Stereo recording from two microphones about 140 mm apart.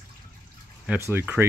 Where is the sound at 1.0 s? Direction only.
15° right (ahead or behind).